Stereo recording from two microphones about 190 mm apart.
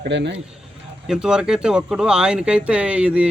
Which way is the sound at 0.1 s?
65° right (ahead or behind).